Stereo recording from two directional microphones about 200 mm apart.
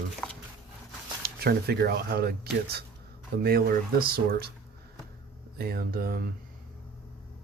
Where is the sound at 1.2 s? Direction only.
50° right (ahead or behind).